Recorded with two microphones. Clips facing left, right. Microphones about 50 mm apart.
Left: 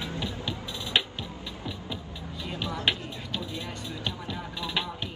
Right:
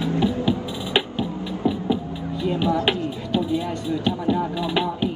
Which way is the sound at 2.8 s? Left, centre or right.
Centre.